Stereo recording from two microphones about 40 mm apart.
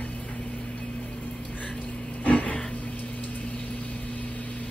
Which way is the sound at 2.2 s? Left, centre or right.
Left.